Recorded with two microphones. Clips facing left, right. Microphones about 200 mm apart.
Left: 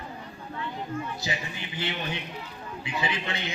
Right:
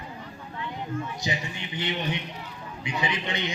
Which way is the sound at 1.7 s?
20° right (ahead or behind).